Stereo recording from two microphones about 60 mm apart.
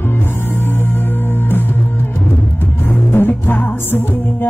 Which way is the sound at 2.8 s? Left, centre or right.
Left.